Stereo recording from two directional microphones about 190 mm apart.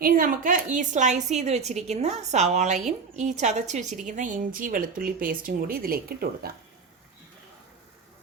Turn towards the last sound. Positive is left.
turn(degrees=-50)  # may be behind; listen again after turning